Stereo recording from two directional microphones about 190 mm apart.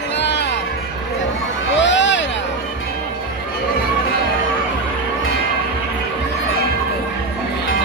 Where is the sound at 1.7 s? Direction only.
70° left (ahead or behind).